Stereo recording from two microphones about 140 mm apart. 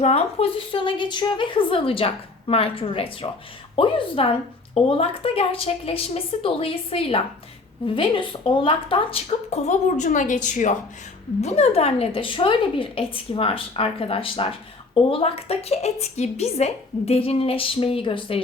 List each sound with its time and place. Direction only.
0.0 s a woman's voice: 50° left (ahead or behind); by 10.8 s 65° left (ahead or behind)
11.3 s a woman's voice: 50° left (ahead or behind)